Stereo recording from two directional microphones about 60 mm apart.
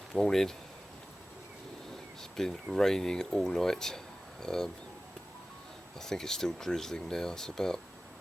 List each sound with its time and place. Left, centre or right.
0.1 s speech: centre
2.3 s speech: centre
6.0 s speech: centre